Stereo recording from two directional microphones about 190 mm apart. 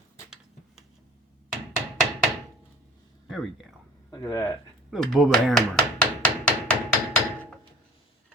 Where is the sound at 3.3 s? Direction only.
Centre (ahead or behind).